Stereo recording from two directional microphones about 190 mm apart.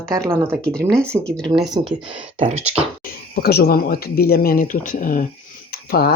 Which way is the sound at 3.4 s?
55° left (ahead or behind).